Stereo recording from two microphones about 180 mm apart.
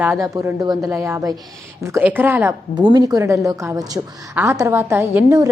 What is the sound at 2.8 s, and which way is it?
A woman's voice, 25° right (ahead or behind).